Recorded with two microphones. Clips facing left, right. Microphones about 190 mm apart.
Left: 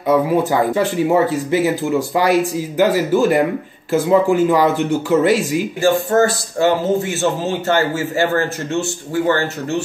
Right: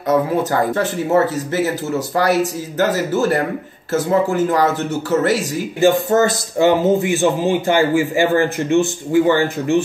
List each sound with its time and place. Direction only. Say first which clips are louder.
0.5 s speech: left 2 dB; 15° left (ahead or behind)
5.8 s a man's voice: right 1 dB; 20° right (ahead or behind)